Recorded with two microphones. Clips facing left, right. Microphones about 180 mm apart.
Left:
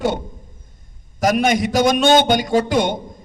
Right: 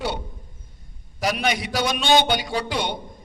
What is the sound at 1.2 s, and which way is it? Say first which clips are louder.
A man's voice: left 7 dB; 45° left (ahead or behind).